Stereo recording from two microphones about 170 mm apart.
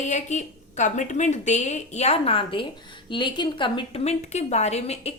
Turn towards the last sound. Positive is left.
turn(degrees=40)  # may be behind; listen again after turning